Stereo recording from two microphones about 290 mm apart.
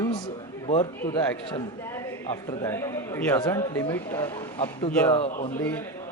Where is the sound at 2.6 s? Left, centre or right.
Centre.